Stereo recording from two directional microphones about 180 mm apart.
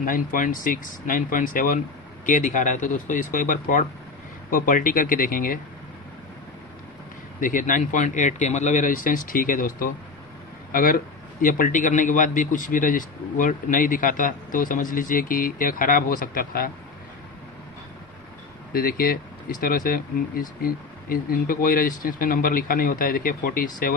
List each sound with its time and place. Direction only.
0.0 s a man's voice: 50° left (ahead or behind)
7.3 s a man's voice: 45° left (ahead or behind)
18.7 s a man's voice: 55° left (ahead or behind)